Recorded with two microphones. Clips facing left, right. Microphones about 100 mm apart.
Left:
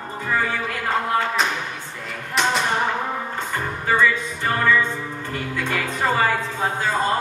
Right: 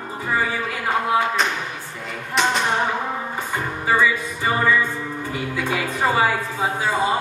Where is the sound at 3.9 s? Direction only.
10° right (ahead or behind).